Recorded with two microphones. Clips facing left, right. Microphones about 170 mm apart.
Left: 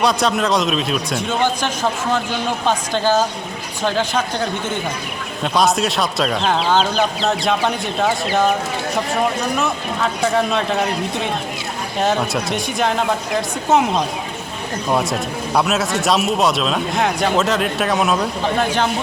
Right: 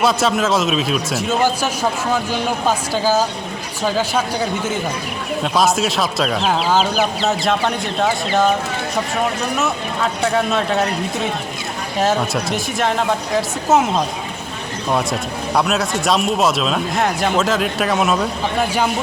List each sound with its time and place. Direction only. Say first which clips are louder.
0.0 s a man's voice: right 1 dB; centre (ahead or behind)
9.6 s speech: even; centre (ahead or behind)
15.5 s speech: even; centre (ahead or behind)